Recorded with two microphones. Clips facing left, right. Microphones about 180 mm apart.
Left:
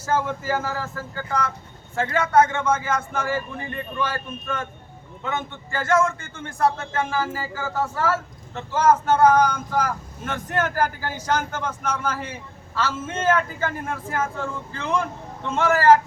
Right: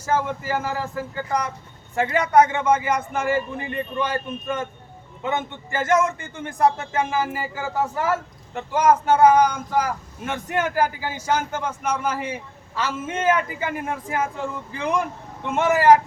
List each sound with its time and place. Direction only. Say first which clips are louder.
0.0 s a man's voice: even; 10° right (ahead or behind)